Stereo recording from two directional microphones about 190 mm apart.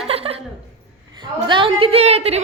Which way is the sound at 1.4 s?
25° right (ahead or behind).